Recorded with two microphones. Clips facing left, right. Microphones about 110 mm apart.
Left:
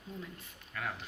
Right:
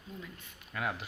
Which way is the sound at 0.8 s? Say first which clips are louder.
Right 4 dB; 10° right (ahead or behind).